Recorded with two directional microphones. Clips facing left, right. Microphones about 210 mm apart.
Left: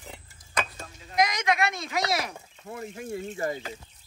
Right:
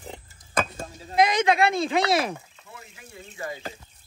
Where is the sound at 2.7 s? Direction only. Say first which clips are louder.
Left 12 dB; 50° left (ahead or behind).